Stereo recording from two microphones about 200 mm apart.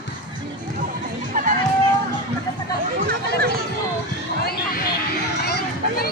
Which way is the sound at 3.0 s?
50° right (ahead or behind).